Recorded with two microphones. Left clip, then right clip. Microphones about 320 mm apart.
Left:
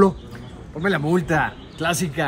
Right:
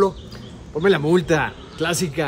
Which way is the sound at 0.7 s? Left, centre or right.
Centre.